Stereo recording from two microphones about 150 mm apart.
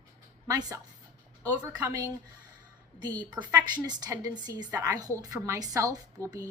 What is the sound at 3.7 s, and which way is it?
A woman's voice, 25° right (ahead or behind).